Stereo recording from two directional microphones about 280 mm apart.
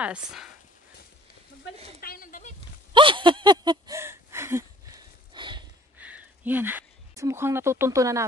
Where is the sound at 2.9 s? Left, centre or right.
Centre.